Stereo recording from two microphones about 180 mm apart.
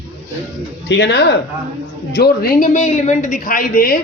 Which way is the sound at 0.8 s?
70° left (ahead or behind).